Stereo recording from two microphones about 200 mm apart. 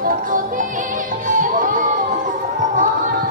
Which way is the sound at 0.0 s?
45° right (ahead or behind).